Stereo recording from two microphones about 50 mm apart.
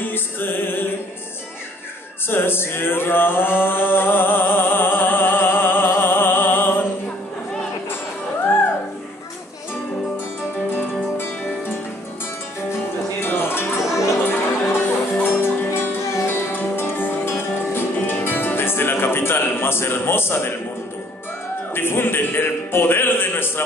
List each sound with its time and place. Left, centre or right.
0.0 s music: left
2.2 s chant: left
11.1 s music: left
13.2 s music: left
16.0 s music: left
16.3 s music: left
21.7 s music: left